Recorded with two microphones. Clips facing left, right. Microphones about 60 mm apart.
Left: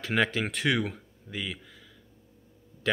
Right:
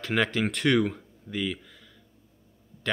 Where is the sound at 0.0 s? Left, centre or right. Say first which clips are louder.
Right 1 dB; centre.